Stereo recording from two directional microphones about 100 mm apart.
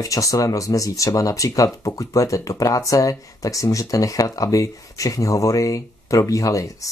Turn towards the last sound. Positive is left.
turn(degrees=35)  # may be behind; listen again after turning